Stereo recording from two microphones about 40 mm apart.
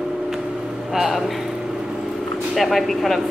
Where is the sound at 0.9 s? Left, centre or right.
Centre.